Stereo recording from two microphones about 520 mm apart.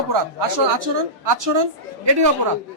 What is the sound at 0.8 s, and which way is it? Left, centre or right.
A man's voice, right.